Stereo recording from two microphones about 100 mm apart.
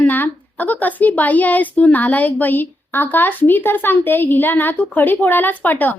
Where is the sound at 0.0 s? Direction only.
15° left (ahead or behind).